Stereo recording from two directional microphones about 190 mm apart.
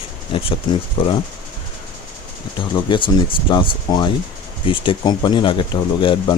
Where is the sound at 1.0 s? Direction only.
30° left (ahead or behind).